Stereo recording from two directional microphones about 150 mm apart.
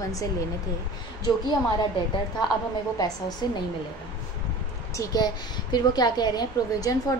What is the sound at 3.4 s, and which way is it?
Speech, 25° left (ahead or behind).